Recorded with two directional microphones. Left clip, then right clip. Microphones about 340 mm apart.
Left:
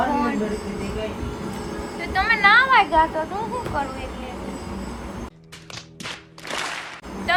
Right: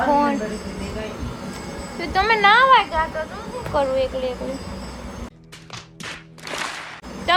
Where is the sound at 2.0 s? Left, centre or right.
Centre.